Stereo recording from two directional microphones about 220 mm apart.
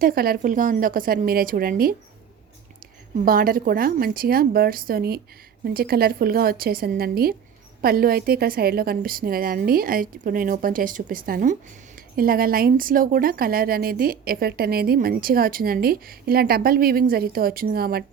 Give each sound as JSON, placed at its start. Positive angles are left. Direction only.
{"t": 0.0, "sound": "a woman's voice", "side_deg": -40}
{"t": 3.2, "sound": "a woman's voice", "side_deg": -40}